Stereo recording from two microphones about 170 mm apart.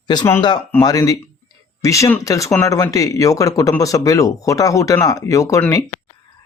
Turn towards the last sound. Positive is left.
turn(degrees=20)  # may be behind; listen again after turning